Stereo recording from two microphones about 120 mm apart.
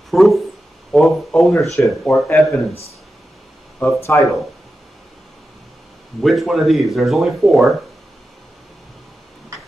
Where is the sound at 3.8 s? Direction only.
25° left (ahead or behind).